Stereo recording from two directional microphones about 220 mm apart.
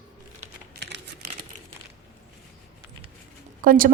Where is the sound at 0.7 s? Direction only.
50° right (ahead or behind).